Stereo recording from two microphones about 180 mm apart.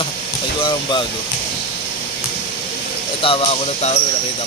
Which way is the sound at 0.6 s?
25° left (ahead or behind).